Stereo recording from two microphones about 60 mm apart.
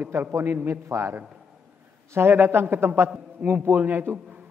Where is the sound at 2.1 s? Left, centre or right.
Right.